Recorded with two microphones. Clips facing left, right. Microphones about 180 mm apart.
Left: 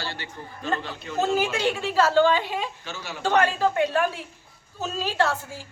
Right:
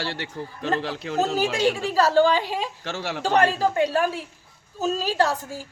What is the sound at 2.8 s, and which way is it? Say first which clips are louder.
Speech: right 7 dB; 85° right.